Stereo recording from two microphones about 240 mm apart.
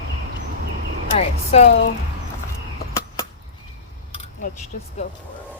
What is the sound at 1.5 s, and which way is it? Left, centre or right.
Speech, left.